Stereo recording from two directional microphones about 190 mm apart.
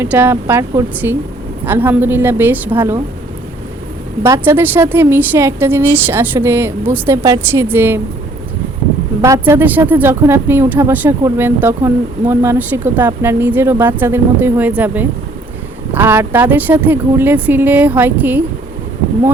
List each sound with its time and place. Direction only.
0.0 s a woman's voice: 10° right (ahead or behind)
4.3 s a woman's voice: 10° right (ahead or behind)
9.2 s a woman's voice: 15° right (ahead or behind)